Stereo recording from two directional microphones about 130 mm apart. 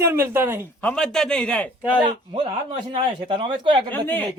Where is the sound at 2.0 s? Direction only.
40° right (ahead or behind).